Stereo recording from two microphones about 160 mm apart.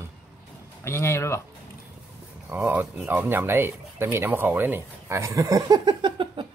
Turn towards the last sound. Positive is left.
turn(degrees=-30)  # may be behind; listen again after turning